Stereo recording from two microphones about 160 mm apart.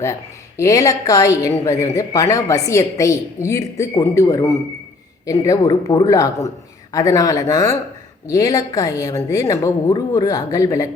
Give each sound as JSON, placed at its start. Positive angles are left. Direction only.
{"t": 0.0, "sound": "a woman's voice", "side_deg": 20}